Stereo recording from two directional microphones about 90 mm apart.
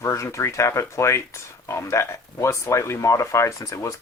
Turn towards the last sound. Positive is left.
turn(degrees=40)  # may be behind; listen again after turning